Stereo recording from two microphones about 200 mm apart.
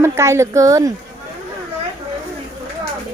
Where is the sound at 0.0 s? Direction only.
15° right (ahead or behind).